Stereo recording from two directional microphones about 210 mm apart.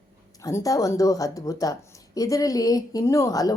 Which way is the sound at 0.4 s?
15° left (ahead or behind).